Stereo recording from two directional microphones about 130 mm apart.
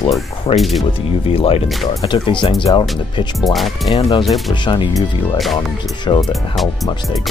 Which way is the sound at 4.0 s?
45° left (ahead or behind).